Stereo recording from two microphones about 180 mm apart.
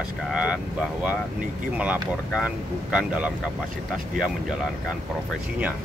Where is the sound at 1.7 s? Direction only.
5° right (ahead or behind).